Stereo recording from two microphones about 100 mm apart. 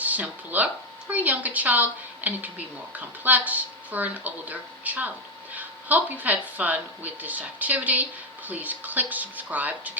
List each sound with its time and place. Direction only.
0.0 s speech: 15° right (ahead or behind)